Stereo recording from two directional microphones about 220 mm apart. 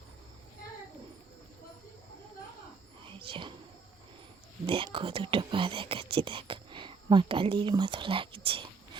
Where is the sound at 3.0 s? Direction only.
25° right (ahead or behind).